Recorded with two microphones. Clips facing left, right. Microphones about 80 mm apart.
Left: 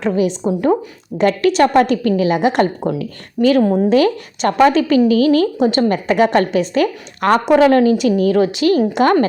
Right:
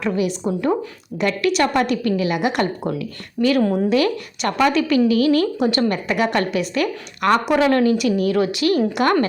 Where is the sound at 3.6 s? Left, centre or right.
Centre.